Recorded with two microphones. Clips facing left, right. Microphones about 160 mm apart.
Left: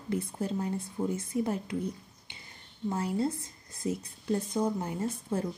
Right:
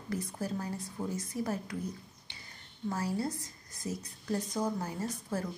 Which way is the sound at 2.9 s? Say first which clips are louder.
Left 3 dB; 25° left (ahead or behind).